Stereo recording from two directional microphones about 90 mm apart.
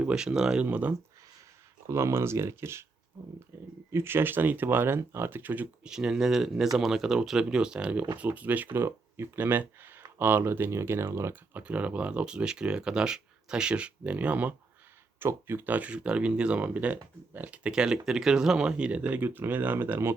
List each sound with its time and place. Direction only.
0.0 s speech: 10° right (ahead or behind)
0.6 s speech: 20° right (ahead or behind)
1.9 s speech: 30° right (ahead or behind)
5.9 s speech: 10° right (ahead or behind); by 11.3 s 30° right (ahead or behind)
11.5 s speech: 15° right (ahead or behind)